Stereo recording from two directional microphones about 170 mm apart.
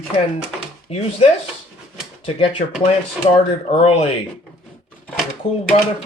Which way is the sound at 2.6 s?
60° left (ahead or behind).